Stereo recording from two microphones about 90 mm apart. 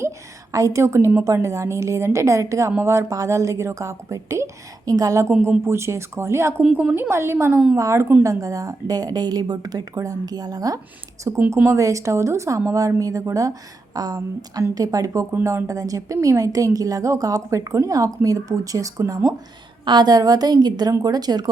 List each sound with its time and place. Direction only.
0.5 s a woman's voice: 35° right (ahead or behind)
5.4 s a woman's voice: 25° right (ahead or behind); by 10.8 s 45° right (ahead or behind)
11.5 s a woman's voice: 30° right (ahead or behind)
19.8 s speech: 55° right (ahead or behind)